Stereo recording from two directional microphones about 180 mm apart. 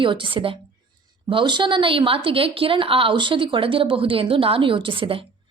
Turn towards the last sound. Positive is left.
turn(degrees=-30)  # may be behind; listen again after turning